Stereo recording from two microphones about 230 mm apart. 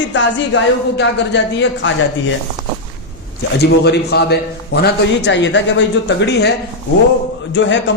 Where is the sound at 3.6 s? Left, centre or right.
Left.